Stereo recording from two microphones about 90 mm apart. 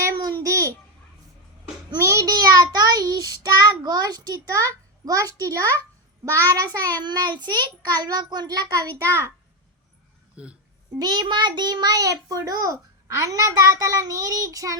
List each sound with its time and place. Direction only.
0.0 s babbling: 35° right (ahead or behind)
2.0 s child singing: 35° right (ahead or behind)
6.5 s a child's voice: 50° right (ahead or behind)
9.0 s a child's voice: 30° right (ahead or behind)
10.3 s speech: 10° right (ahead or behind)
11.0 s a child's voice: 55° right (ahead or behind)